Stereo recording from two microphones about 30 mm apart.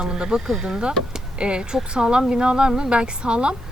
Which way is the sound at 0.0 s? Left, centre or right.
Right.